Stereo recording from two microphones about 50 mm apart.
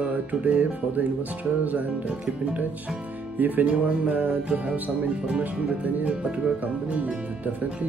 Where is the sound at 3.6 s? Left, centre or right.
Right.